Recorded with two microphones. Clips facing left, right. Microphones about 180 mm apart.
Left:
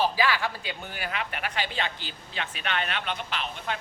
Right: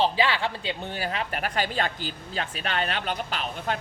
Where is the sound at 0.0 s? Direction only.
25° right (ahead or behind).